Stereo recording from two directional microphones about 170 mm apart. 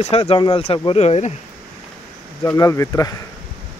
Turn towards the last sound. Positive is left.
turn(degrees=20)  # may be behind; listen again after turning